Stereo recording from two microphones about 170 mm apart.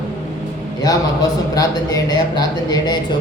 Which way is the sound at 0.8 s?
20° left (ahead or behind).